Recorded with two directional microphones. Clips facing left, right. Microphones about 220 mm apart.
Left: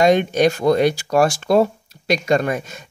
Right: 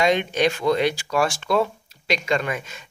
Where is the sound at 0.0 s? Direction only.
40° left (ahead or behind).